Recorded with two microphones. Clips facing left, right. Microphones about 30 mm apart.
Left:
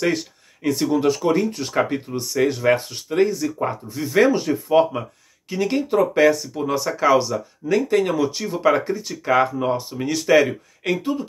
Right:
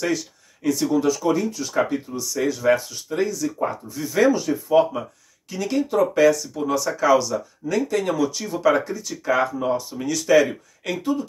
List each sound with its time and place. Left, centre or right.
0.7 s speech: left
3.5 s speech: left
4.2 s speech: left